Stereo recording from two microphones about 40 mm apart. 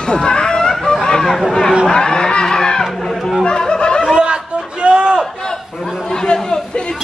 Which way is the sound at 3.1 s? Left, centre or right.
Centre.